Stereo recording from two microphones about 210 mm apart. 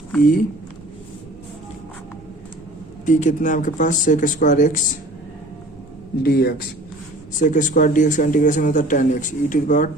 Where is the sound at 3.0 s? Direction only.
35° left (ahead or behind).